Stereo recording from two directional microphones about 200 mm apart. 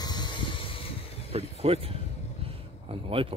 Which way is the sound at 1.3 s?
30° right (ahead or behind).